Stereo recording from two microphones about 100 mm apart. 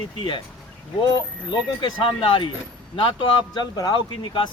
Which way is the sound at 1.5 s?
55° left (ahead or behind).